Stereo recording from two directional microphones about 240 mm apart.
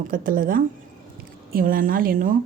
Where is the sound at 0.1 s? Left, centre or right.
Right.